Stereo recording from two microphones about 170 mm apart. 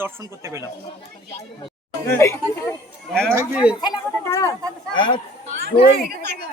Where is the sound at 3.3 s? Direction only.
5° right (ahead or behind).